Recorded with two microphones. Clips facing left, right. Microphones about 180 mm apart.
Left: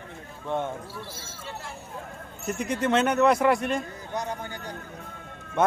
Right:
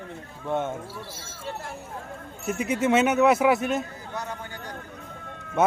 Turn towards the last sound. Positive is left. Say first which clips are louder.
# right 1 dB
turn(degrees=-5)  # may be behind; listen again after turning